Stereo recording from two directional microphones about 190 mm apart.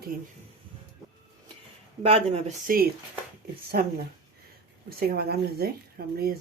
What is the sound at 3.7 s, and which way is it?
Speech, 50° right (ahead or behind).